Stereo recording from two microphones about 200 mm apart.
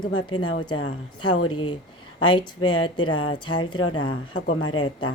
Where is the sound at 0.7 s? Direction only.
90° left.